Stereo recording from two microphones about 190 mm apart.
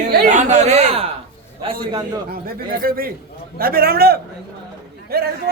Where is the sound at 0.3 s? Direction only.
40° right (ahead or behind).